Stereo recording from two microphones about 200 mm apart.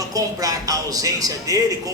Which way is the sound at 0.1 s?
15° right (ahead or behind).